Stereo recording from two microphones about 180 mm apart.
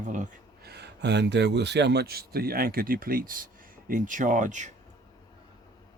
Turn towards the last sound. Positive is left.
turn(degrees=-45)  # may be behind; listen again after turning